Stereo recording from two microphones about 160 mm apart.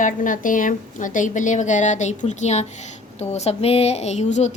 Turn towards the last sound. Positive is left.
turn(degrees=45)  # may be behind; listen again after turning